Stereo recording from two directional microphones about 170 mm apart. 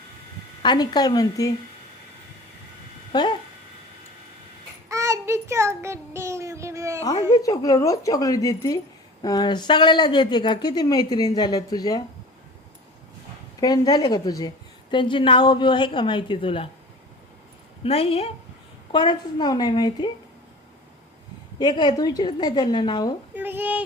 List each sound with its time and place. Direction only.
0.6 s a woman's voice: 25° left (ahead or behind)
3.1 s speech: 25° left (ahead or behind)
4.9 s child singing: 20° right (ahead or behind)
7.3 s a woman's voice: 20° left (ahead or behind)
13.6 s a woman's voice: 20° left (ahead or behind)
17.8 s a woman's voice: 35° left (ahead or behind)
21.6 s a woman's voice: 25° left (ahead or behind)
23.3 s speech: 10° right (ahead or behind)